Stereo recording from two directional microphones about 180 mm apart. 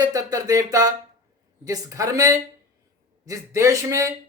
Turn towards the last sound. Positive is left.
turn(degrees=-15)  # may be behind; listen again after turning